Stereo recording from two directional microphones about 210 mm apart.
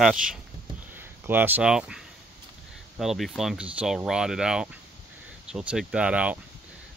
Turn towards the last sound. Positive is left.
turn(degrees=-5)  # may be behind; listen again after turning